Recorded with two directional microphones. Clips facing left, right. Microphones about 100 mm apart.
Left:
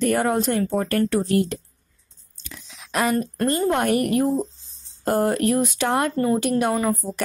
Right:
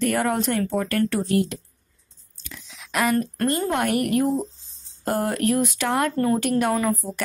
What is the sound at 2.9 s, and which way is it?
A woman's voice, 25° left (ahead or behind).